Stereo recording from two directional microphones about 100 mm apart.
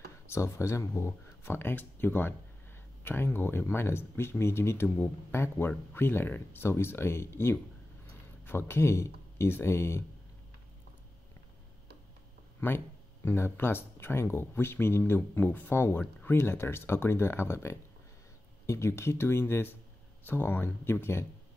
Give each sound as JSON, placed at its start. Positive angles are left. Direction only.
{"t": 0.3, "sound": "speech", "side_deg": 30}
{"t": 12.5, "sound": "speech", "side_deg": 20}